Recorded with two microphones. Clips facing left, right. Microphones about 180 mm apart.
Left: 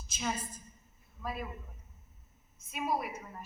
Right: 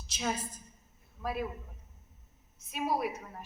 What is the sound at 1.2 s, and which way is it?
Speech, 75° right (ahead or behind).